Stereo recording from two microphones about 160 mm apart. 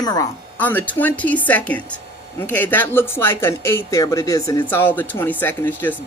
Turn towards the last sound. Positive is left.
turn(degrees=15)  # may be behind; listen again after turning